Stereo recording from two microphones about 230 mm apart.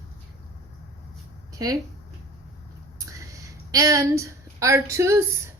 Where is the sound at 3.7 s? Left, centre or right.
Centre.